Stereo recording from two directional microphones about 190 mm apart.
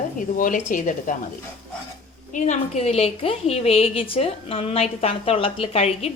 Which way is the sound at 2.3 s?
40° left (ahead or behind).